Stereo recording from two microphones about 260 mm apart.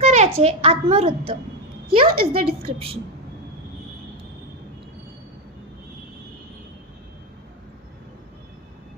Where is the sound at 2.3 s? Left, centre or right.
Right.